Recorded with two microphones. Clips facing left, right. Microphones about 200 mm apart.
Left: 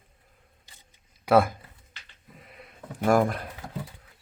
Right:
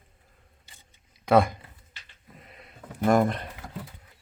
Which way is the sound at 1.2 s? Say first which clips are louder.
Even; 5° left (ahead or behind).